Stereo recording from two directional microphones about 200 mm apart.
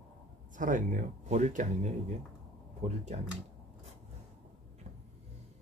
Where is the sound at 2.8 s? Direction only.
30° right (ahead or behind).